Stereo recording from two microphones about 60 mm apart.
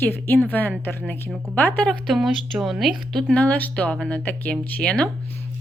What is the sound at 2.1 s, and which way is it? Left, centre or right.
Speech, centre.